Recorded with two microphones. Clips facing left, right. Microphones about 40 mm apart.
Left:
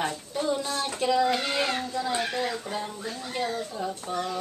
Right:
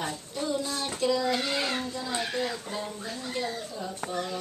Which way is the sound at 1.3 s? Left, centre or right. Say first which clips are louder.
Left 2 dB; centre.